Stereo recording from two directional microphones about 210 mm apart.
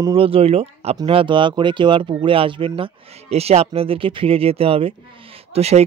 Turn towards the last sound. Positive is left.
turn(degrees=-30)  # may be behind; listen again after turning